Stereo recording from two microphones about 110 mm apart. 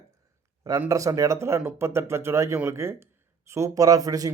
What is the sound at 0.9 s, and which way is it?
A man's voice, 30° right (ahead or behind).